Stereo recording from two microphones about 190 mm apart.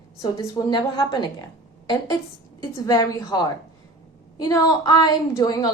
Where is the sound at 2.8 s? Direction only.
20° left (ahead or behind).